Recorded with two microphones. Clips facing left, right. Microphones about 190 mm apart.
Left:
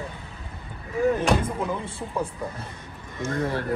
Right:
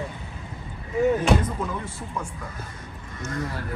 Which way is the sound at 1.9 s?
35° left (ahead or behind).